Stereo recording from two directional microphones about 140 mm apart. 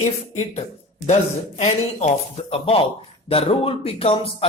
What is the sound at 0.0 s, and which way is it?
Speech, 50° left (ahead or behind).